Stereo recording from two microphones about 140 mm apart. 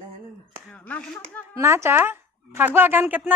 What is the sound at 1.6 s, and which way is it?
A woman's voice, 20° right (ahead or behind).